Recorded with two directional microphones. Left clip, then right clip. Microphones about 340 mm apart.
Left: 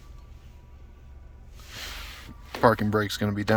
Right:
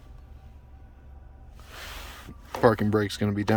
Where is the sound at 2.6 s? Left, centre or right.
Centre.